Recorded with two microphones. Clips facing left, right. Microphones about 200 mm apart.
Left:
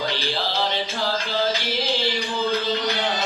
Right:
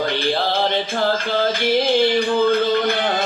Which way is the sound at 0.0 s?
55° right (ahead or behind).